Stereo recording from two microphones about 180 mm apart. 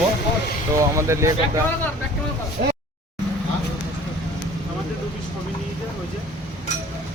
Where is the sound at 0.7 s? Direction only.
15° right (ahead or behind).